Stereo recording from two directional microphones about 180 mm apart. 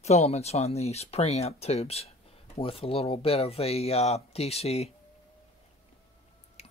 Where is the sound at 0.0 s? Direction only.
35° left (ahead or behind).